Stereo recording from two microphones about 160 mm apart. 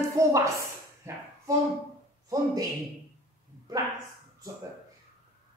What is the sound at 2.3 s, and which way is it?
Speech, 20° right (ahead or behind).